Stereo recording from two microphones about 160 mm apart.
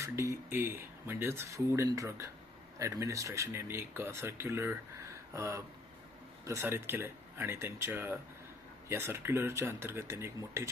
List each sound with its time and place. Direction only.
0.0 s speech: 20° right (ahead or behind)